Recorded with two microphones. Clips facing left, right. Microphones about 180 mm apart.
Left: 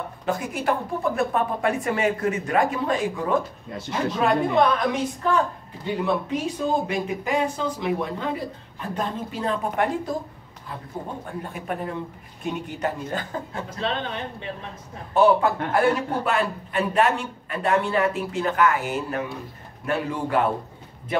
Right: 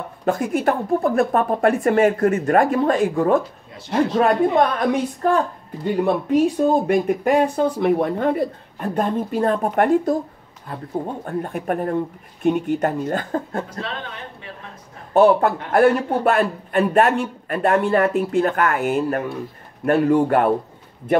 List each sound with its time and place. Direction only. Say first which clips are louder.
0.2 s a man's voice: right 8 dB; 50° right (ahead or behind)
11.2 s a man's voice: right 7 dB; 50° right (ahead or behind)
13.7 s speech: left 3 dB; 25° left (ahead or behind)
15.1 s a man's voice: right 4 dB; 50° right (ahead or behind)